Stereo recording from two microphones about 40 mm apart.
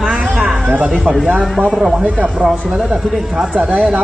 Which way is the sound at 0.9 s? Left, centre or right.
Centre.